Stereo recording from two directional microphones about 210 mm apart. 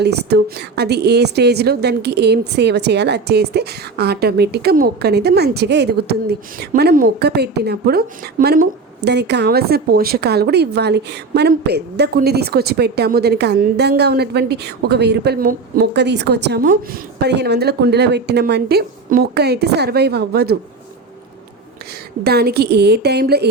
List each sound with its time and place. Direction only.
0.0 s a woman's voice: 50° right (ahead or behind)
22.2 s a woman's voice: 50° right (ahead or behind)